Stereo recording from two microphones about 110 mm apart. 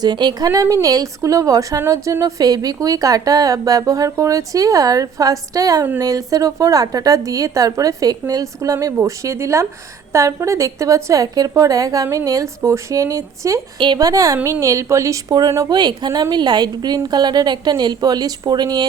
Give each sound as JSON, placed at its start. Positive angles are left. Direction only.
{"t": 0.0, "sound": "a woman's voice", "side_deg": -40}
{"t": 13.7, "sound": "a woman's voice", "side_deg": -45}
{"t": 15.8, "sound": "a woman's voice", "side_deg": -40}